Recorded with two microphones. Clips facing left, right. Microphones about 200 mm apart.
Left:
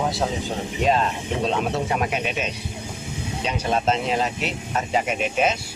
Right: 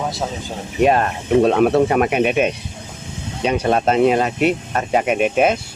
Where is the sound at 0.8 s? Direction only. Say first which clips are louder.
Right 5 dB; 60° right (ahead or behind).